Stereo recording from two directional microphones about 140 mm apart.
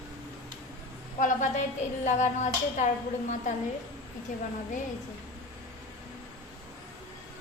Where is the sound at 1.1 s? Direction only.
65° left (ahead or behind).